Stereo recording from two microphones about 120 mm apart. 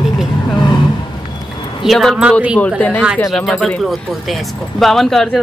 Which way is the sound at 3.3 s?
Centre (ahead or behind).